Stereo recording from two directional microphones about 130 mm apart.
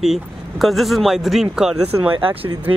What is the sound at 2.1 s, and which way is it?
Speech, 45° right (ahead or behind).